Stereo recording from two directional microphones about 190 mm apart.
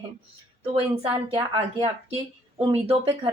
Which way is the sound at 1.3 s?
25° right (ahead or behind).